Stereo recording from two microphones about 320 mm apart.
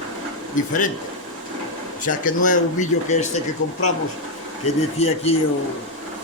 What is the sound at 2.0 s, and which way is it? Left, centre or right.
Speech, left.